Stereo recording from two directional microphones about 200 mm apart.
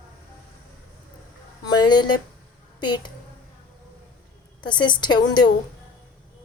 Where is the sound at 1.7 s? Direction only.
20° left (ahead or behind).